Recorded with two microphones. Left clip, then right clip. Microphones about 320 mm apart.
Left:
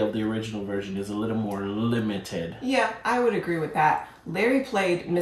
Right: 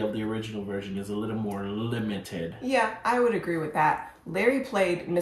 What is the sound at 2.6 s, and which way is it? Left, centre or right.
Speech, centre.